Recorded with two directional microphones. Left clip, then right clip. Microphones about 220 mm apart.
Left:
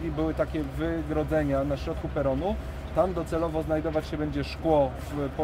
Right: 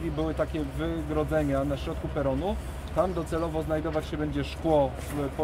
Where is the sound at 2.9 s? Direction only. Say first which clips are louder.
Left 2 dB; centre (ahead or behind).